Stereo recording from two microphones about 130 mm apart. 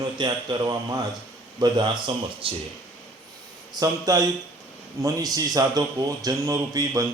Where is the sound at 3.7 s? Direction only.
25° right (ahead or behind).